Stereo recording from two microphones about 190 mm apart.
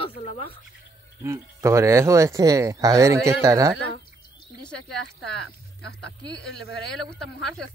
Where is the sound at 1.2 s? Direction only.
15° right (ahead or behind).